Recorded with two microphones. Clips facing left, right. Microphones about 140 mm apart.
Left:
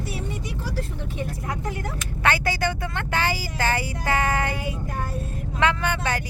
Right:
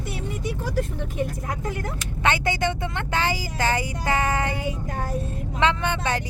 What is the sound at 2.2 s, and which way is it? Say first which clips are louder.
Speech: even; 20° right (ahead or behind).